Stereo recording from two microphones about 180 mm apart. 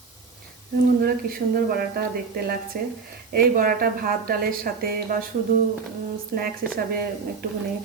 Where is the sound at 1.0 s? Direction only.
55° right (ahead or behind).